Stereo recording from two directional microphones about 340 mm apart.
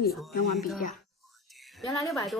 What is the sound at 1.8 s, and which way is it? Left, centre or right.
Speech, centre.